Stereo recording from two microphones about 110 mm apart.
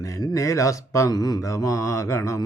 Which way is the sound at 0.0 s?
30° left (ahead or behind).